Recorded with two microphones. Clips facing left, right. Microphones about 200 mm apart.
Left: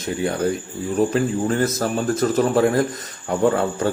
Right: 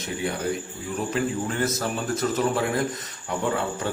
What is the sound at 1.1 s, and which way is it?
A man's voice, 40° left (ahead or behind).